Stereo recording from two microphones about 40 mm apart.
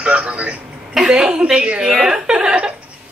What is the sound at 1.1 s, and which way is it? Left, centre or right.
Speech, right.